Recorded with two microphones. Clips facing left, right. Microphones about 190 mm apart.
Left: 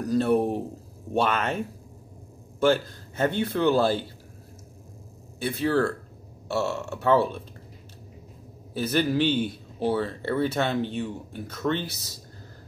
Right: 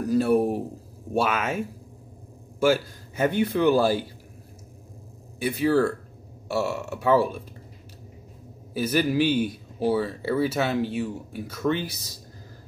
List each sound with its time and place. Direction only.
0.0 s speech: 10° right (ahead or behind)
2.6 s speech: 10° right (ahead or behind)
5.4 s speech: 10° right (ahead or behind)
8.7 s speech: 10° right (ahead or behind)